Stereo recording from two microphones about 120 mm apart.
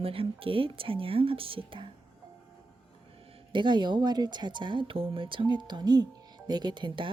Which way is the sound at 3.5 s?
40° right (ahead or behind).